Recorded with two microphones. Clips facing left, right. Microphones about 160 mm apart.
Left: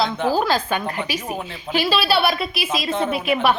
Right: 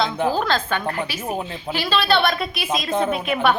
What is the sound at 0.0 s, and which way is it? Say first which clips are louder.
A woman's voice: left 1 dB; 10° left (ahead or behind).